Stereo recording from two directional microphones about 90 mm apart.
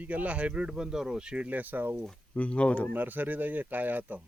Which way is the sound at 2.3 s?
15° left (ahead or behind).